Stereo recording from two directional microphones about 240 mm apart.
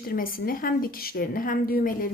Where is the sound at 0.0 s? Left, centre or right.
Left.